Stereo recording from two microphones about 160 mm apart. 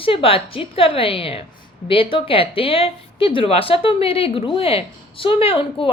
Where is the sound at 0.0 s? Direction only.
35° left (ahead or behind).